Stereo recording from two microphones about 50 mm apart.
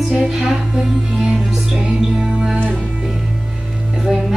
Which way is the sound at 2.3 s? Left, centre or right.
Centre.